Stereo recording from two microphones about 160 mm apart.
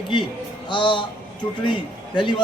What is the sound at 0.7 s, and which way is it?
Speech, 30° left (ahead or behind).